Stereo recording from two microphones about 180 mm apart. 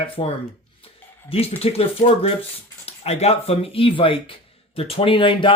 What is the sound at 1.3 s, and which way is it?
Speech, 35° left (ahead or behind).